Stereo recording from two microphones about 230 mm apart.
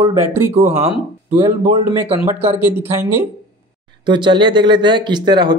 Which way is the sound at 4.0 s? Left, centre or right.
Centre.